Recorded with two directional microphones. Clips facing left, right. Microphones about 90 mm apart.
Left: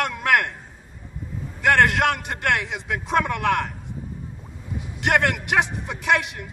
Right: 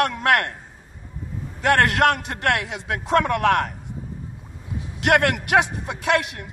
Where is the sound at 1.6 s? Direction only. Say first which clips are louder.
Right 1 dB; 55° right (ahead or behind).